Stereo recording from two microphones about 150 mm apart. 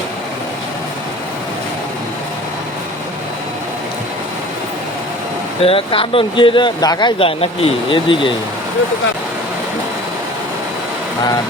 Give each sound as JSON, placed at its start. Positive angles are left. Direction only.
{"t": 5.6, "sound": "speech", "side_deg": 35}
{"t": 7.2, "sound": "speech", "side_deg": 35}